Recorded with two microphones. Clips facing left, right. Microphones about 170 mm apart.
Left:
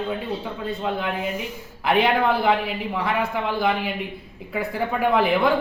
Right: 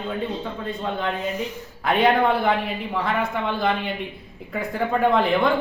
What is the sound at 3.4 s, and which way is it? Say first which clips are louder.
Speech: left 1 dB; 5° left (ahead or behind).